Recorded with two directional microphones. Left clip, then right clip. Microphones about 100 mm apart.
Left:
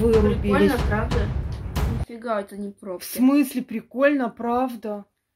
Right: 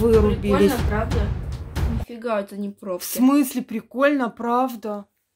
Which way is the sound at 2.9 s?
10° right (ahead or behind).